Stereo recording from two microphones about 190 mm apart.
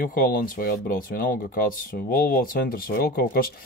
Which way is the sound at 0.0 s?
50° left (ahead or behind).